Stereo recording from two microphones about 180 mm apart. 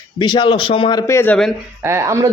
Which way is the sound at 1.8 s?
15° right (ahead or behind).